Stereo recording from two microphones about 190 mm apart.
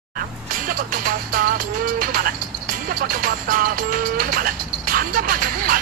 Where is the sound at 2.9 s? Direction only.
50° right (ahead or behind).